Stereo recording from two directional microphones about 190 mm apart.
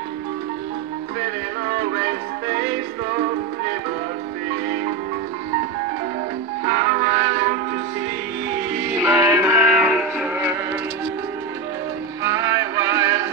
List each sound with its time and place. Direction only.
2.0 s music: 45° right (ahead or behind)
6.7 s music: 45° right (ahead or behind)
9.0 s music: 10° right (ahead or behind)
12.2 s music: 20° right (ahead or behind)